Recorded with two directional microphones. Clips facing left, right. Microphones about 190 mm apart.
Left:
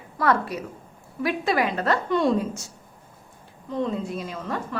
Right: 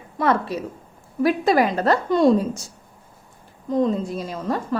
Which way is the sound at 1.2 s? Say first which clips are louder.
Right 5 dB; 40° right (ahead or behind).